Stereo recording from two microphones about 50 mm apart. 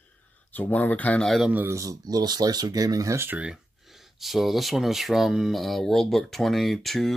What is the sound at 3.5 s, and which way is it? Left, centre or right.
Speech, centre.